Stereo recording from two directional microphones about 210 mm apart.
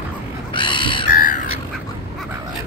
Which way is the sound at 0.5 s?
25° left (ahead or behind).